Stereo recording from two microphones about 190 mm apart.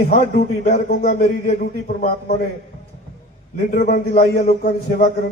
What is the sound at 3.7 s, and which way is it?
A man's voice, 55° left (ahead or behind).